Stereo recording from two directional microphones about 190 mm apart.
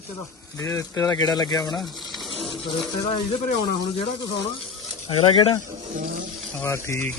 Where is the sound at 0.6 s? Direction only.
15° left (ahead or behind).